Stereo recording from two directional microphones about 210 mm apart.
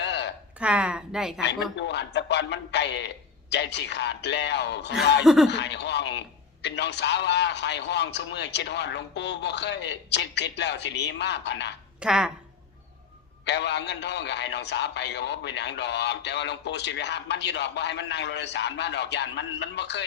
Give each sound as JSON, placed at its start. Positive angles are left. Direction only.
{"t": 0.0, "sound": "a sound", "side_deg": 55}
{"t": 0.6, "sound": "a woman's voice", "side_deg": -5}
{"t": 1.7, "sound": "a man's voice", "side_deg": 55}
{"t": 5.2, "sound": "speech", "side_deg": 0}
{"t": 5.5, "sound": "a man's voice", "side_deg": 55}
{"t": 11.9, "sound": "speech", "side_deg": -5}
{"t": 13.4, "sound": "a man's voice", "side_deg": 55}